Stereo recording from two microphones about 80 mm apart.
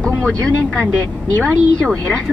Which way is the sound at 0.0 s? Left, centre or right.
Centre.